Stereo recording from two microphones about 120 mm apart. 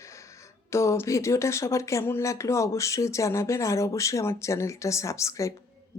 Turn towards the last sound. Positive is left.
turn(degrees=25)  # may be behind; listen again after turning